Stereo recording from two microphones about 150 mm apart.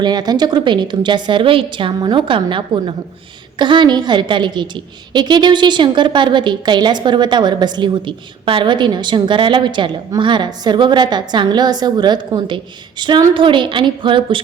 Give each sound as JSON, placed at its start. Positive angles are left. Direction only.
{"t": 0.0, "sound": "a woman's voice", "side_deg": -25}